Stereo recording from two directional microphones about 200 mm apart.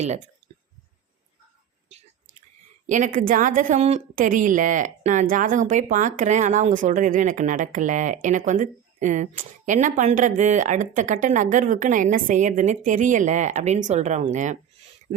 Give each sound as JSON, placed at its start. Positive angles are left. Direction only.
{"t": 2.8, "sound": "a woman's voice", "side_deg": -40}